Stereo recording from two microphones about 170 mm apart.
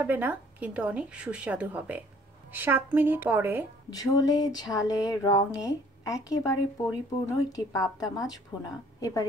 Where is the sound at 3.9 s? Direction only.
20° left (ahead or behind).